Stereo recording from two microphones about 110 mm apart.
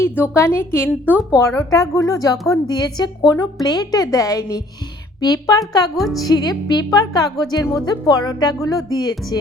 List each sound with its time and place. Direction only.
0.0 s a woman's voice: 25° left (ahead or behind)
6.0 s speech: centre (ahead or behind)
6.2 s speech: 40° left (ahead or behind)